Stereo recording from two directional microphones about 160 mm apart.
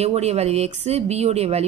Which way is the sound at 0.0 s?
40° right (ahead or behind).